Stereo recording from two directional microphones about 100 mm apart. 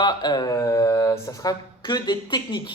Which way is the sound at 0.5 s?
30° left (ahead or behind).